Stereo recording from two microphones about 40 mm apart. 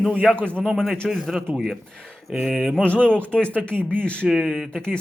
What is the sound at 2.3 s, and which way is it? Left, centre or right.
Speech, right.